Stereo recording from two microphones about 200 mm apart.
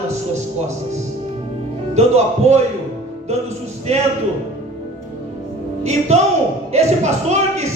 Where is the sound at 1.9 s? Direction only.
35° right (ahead or behind).